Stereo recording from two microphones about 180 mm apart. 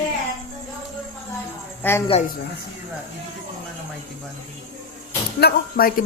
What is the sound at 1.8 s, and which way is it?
Speech, 10° left (ahead or behind).